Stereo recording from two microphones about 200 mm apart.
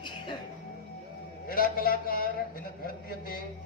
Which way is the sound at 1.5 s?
45° left (ahead or behind).